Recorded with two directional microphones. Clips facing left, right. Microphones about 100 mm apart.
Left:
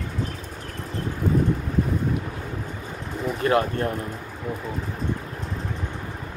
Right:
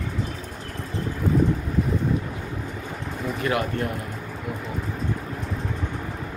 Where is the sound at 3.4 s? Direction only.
35° left (ahead or behind).